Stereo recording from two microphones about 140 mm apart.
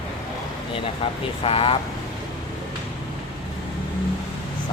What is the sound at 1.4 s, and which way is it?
Speech, 40° left (ahead or behind).